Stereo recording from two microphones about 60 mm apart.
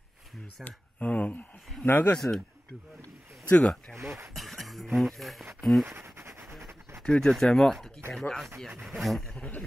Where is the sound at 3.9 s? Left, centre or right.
Right.